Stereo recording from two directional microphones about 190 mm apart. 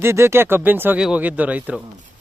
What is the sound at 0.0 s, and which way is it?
Speech, 15° right (ahead or behind).